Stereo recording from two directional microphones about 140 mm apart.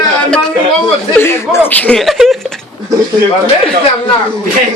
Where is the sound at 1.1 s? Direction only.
15° left (ahead or behind); by 2.3 s centre (ahead or behind).